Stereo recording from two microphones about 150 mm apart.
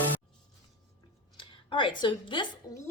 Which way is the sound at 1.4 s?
35° left (ahead or behind).